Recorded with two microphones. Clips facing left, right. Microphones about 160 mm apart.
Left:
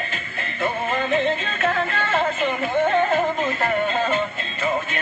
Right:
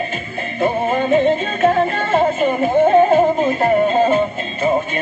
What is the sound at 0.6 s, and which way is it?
Music, 40° right (ahead or behind).